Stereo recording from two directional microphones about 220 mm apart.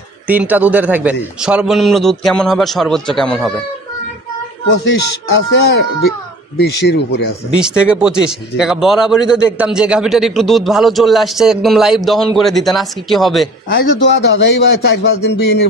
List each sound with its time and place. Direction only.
0.3 s a man's voice: 5° right (ahead or behind)
4.8 s a man's voice: 50° left (ahead or behind)
7.5 s a man's voice: 5° right (ahead or behind)
13.7 s a man's voice: 50° left (ahead or behind)